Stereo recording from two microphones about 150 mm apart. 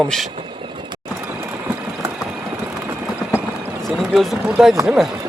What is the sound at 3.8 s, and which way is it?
Speech, centre (ahead or behind).